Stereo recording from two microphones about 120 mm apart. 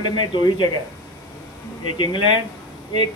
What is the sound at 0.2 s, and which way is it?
Speech, 40° left (ahead or behind).